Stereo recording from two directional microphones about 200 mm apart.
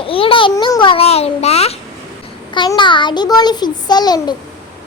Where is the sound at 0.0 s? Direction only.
25° left (ahead or behind).